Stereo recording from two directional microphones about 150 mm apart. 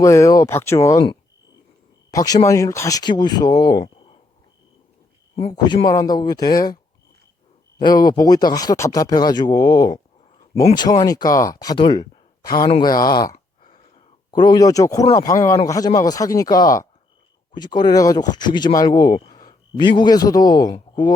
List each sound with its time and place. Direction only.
0.0 s speech: 20° left (ahead or behind)
2.0 s speech: 25° left (ahead or behind)
5.4 s speech: 35° left (ahead or behind)
7.8 s speech: 25° left (ahead or behind)
13.1 s a sound: 65° left (ahead or behind)
14.3 s a man's voice: 25° left (ahead or behind)